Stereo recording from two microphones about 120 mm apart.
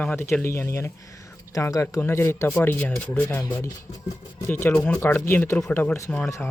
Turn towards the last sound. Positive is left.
turn(degrees=20)  # may be behind; listen again after turning